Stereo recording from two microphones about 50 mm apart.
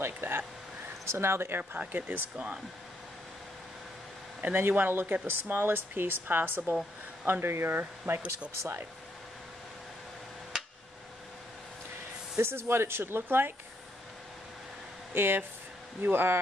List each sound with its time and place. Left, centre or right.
0.0 s speech: right
1.6 s speech: right
4.6 s a woman's voice: right
8.1 s speech: right
10.5 s a sound: centre
12.4 s a woman's voice: right
15.1 s a woman's voice: right